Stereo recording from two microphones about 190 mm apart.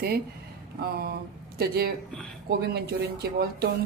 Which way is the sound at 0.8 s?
55° right (ahead or behind).